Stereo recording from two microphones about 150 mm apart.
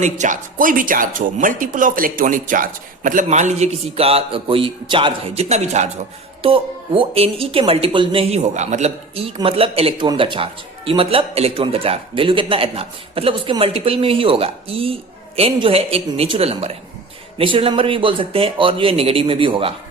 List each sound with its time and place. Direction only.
0.0 s a man's voice: 55° right (ahead or behind); by 19.7 s 35° right (ahead or behind)